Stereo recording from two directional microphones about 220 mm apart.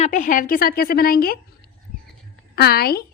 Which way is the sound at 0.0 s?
35° left (ahead or behind).